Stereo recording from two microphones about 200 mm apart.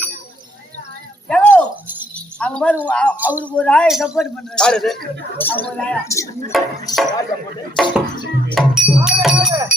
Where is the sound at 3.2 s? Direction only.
10° right (ahead or behind).